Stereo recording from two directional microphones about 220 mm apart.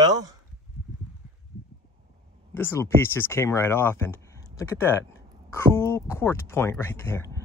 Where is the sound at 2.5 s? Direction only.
10° left (ahead or behind).